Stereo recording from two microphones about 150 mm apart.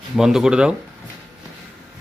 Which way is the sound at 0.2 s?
5° right (ahead or behind).